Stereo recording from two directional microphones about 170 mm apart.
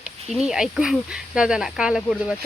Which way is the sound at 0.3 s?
5° right (ahead or behind).